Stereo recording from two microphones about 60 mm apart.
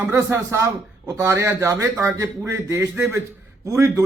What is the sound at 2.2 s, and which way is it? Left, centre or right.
A woman's voice, right.